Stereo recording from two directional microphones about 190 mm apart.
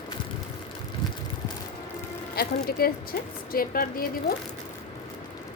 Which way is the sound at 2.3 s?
55° left (ahead or behind).